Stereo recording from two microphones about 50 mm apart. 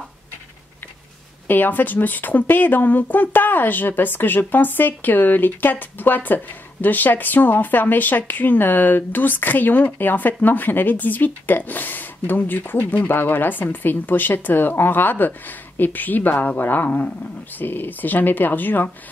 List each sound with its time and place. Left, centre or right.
1.5 s speech: left